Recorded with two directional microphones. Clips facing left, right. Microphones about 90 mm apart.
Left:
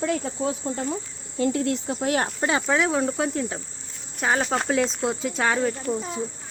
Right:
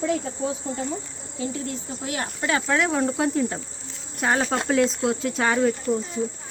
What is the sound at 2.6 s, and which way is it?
Speech, centre (ahead or behind).